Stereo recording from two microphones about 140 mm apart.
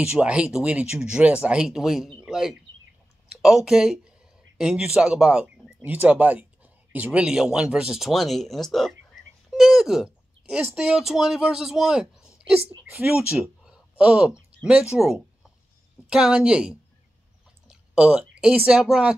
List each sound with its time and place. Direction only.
0.0 s speech: 5° right (ahead or behind)
2.2 s bird: 5° right (ahead or behind)
3.3 s a man's voice: 5° right (ahead or behind)